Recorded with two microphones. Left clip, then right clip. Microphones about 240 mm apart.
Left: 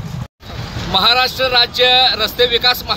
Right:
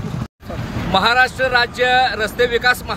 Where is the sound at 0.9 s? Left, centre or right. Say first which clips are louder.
Left 1 dB; centre.